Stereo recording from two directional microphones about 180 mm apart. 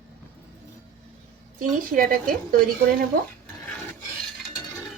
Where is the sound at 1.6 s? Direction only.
50° right (ahead or behind).